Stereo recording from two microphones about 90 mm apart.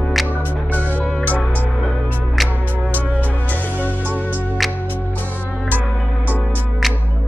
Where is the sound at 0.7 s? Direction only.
20° left (ahead or behind).